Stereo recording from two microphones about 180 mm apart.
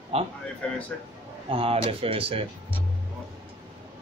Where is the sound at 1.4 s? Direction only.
30° right (ahead or behind).